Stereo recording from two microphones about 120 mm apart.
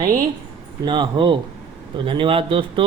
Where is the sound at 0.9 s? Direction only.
40° right (ahead or behind).